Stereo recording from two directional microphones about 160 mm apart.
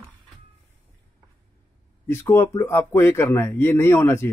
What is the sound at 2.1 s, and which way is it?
Speech, 15° left (ahead or behind).